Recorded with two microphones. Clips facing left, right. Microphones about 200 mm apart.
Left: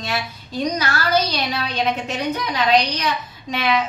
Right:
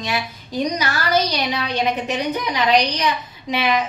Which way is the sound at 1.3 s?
15° right (ahead or behind).